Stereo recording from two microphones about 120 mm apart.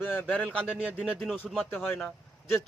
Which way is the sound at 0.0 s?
15° left (ahead or behind).